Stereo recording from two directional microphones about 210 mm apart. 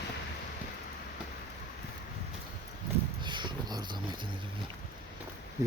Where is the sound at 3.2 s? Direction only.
20° right (ahead or behind).